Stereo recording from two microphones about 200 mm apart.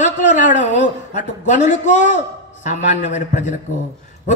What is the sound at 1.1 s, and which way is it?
A man's voice, 40° left (ahead or behind).